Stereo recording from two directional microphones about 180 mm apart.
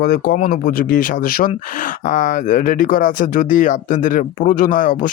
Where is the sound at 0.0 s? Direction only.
55° left (ahead or behind).